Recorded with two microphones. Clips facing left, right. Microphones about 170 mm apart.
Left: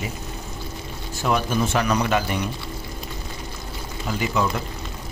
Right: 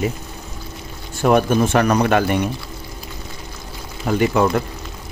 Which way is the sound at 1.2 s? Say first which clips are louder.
Right 7 dB; 55° right (ahead or behind).